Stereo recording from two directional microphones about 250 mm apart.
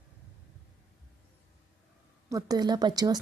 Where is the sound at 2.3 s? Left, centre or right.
Centre.